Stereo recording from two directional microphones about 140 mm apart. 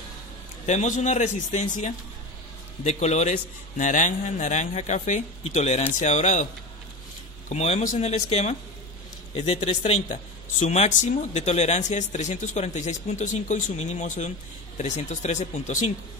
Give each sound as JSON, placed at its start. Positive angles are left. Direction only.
{"t": 0.7, "sound": "speech", "side_deg": 60}
{"t": 7.4, "sound": "speech", "side_deg": 50}